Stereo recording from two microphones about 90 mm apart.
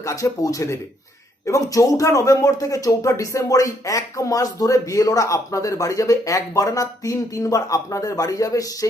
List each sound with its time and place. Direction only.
0.0 s a man's voice: 35° left (ahead or behind)